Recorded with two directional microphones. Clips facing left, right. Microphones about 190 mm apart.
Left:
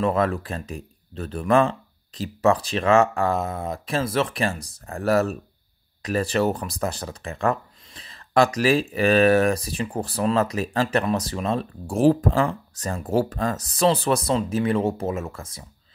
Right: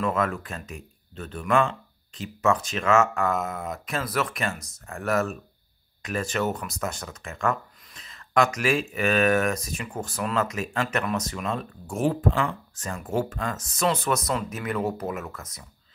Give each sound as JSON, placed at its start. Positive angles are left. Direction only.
{"t": 0.0, "sound": "speech", "side_deg": 30}